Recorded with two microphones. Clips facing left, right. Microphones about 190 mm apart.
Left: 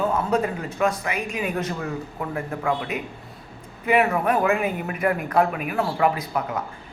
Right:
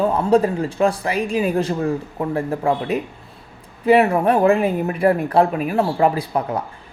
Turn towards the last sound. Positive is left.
turn(degrees=-30)  # may be behind; listen again after turning